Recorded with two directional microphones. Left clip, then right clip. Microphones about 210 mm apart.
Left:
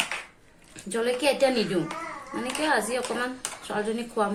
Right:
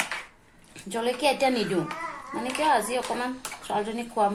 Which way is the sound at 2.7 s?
20° right (ahead or behind).